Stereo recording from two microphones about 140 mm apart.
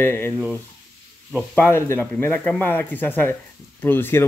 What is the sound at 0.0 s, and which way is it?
Speech, 15° left (ahead or behind).